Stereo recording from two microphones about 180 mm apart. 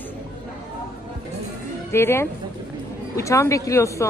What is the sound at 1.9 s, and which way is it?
A woman's voice, 15° left (ahead or behind).